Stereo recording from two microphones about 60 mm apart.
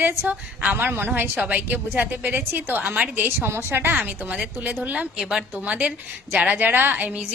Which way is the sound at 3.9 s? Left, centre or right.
Right.